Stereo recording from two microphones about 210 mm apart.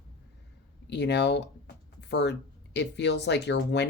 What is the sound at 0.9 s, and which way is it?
Speech, 55° left (ahead or behind).